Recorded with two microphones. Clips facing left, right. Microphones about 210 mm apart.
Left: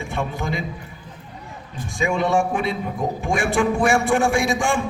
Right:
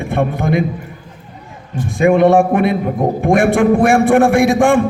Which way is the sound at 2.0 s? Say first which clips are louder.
Right 10 dB; 55° right (ahead or behind).